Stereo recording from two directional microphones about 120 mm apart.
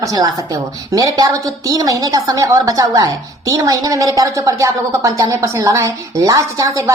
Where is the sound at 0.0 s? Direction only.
30° right (ahead or behind).